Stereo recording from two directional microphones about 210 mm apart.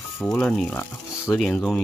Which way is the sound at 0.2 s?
5° left (ahead or behind).